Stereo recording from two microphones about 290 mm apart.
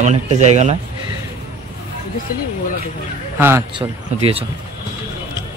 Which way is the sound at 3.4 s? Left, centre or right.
Centre.